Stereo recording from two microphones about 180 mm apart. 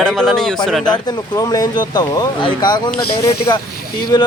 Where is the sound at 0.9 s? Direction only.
25° left (ahead or behind).